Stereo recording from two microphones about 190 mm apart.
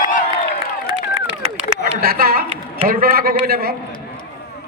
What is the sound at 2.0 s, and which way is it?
A man's voice, 50° right (ahead or behind).